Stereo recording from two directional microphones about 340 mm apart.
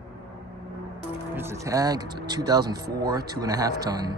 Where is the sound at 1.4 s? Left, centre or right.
Centre.